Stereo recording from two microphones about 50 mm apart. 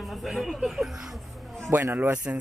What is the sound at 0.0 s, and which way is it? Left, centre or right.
Speech, centre.